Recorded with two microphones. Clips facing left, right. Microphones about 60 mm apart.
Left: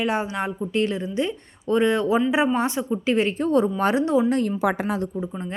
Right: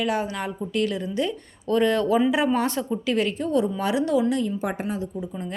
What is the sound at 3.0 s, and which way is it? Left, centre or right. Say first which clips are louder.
A woman's voice: left 4 dB; left.